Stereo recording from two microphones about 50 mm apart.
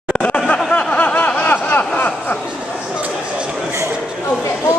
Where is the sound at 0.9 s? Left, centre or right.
Left.